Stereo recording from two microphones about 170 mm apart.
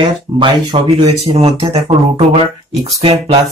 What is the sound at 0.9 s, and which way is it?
Speech, 35° right (ahead or behind).